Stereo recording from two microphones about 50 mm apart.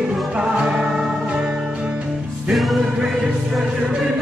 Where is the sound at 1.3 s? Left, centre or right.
Right.